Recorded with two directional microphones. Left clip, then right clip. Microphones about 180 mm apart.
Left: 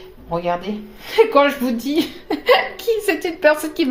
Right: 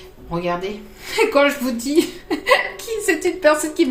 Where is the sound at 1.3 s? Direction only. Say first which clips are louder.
Left 1 dB; 40° left (ahead or behind).